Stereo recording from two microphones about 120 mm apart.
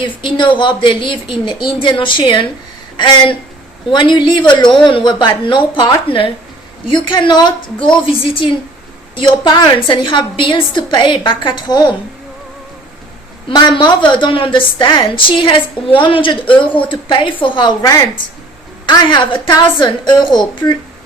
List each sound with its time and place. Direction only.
0.0 s a woman's voice: 45° left (ahead or behind)
13.5 s a woman's voice: 40° left (ahead or behind)